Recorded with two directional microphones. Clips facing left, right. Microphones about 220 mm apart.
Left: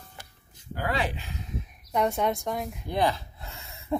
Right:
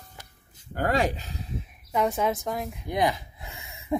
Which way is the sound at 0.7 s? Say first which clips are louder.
Right 5 dB; 45° right (ahead or behind).